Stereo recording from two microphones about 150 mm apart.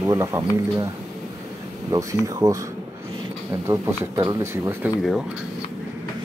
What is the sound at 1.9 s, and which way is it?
Speech, 20° right (ahead or behind).